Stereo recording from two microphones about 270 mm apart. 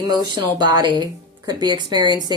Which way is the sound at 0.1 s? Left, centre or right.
Centre.